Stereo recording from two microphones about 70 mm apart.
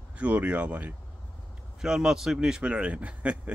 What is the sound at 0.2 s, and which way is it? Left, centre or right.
Speech, centre.